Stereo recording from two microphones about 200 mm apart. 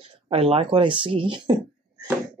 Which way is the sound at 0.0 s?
30° right (ahead or behind).